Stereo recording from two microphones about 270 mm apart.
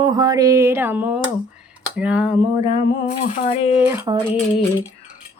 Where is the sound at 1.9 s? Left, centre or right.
Centre.